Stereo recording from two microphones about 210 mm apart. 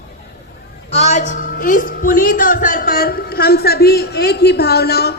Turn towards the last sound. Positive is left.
turn(degrees=50)  # may be behind; listen again after turning